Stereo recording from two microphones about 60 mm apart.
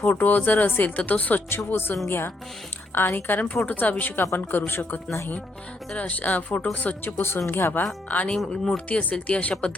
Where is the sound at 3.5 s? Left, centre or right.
Left.